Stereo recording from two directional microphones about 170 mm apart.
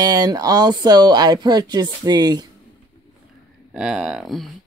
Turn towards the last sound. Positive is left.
turn(degrees=0)  # may be behind; listen again after turning